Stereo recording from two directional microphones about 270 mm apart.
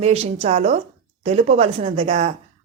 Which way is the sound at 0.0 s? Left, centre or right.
Right.